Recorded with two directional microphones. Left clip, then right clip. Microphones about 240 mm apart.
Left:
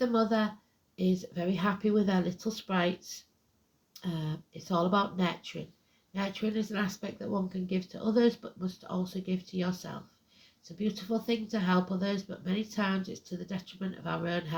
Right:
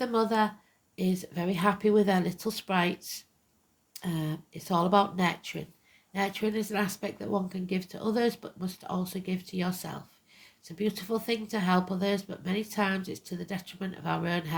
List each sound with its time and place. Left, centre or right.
0.0 s speech: right